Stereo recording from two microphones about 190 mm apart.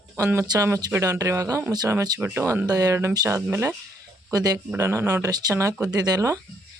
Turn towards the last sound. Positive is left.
turn(degrees=-20)  # may be behind; listen again after turning